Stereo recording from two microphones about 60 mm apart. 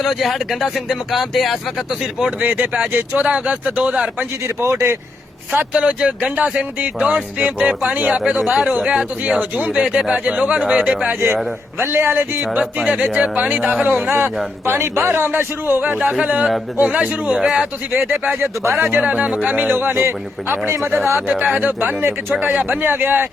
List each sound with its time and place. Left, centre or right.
0.0 s speech: centre
2.6 s speech: centre
4.4 s speech: right
5.7 s speech: centre
8.2 s speech: centre
9.2 s speech: right
11.8 s speech: right
12.5 s speech: centre
14.7 s speech: right
16.0 s speech: centre
17.3 s speech: centre
18.4 s speech: right
18.9 s speech: centre; by 20.9 s right
21.2 s speech: right